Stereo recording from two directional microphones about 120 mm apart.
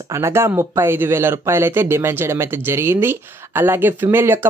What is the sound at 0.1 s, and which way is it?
Speech, 20° right (ahead or behind).